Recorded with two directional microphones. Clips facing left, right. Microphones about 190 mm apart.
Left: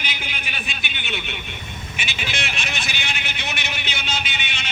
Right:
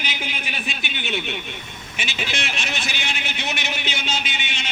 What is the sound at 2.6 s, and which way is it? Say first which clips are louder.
A man's voice: right 1 dB; 40° right (ahead or behind).